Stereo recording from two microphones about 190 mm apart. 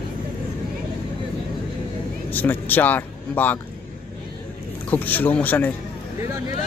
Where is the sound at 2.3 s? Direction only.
10° left (ahead or behind).